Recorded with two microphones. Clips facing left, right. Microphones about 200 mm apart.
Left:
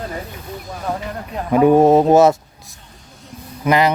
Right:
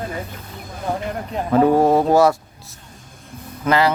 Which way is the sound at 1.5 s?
15° left (ahead or behind).